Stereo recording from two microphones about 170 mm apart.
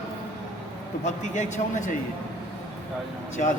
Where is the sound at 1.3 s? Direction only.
45° left (ahead or behind).